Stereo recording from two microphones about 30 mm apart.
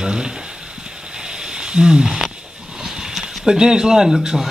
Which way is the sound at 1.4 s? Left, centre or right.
Right.